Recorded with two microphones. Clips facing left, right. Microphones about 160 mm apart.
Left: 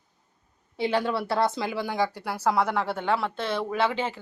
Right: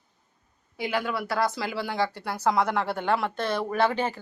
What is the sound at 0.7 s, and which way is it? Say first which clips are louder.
Speech: left 3 dB; 30° left (ahead or behind).